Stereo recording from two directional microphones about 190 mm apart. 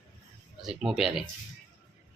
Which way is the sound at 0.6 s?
Centre (ahead or behind).